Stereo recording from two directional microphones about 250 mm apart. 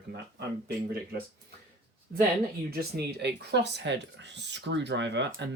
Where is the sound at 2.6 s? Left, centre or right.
Right.